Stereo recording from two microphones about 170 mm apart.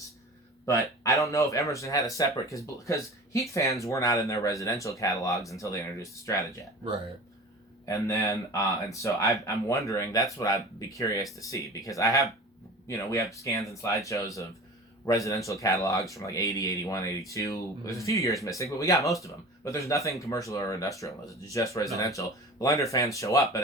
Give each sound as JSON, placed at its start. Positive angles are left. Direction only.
{"t": 0.6, "sound": "speech", "side_deg": 20}
{"t": 7.9, "sound": "speech", "side_deg": 20}